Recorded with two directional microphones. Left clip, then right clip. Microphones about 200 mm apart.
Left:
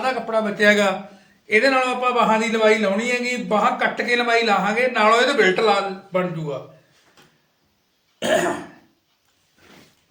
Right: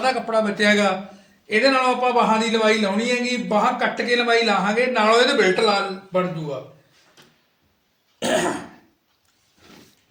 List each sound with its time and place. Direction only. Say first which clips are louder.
0.0 s a man's voice: right 1 dB; centre (ahead or behind)
8.2 s a man's voice: left 2 dB; 5° left (ahead or behind)